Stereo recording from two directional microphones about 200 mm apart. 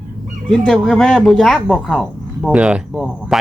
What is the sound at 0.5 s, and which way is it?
Speech, 5° left (ahead or behind).